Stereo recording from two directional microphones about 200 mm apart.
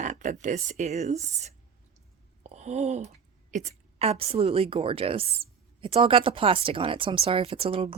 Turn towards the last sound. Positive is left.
turn(degrees=-30)  # may be behind; listen again after turning